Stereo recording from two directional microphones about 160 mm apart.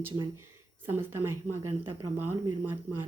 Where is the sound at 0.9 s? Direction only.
15° right (ahead or behind).